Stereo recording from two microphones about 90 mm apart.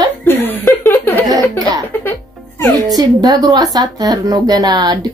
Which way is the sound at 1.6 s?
45° right (ahead or behind).